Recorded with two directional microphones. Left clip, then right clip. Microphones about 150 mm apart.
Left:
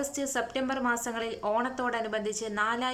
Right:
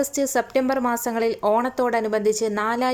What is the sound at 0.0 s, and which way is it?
Speech, 30° right (ahead or behind).